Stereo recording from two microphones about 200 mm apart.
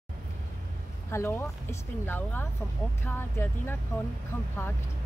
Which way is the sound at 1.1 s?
15° left (ahead or behind).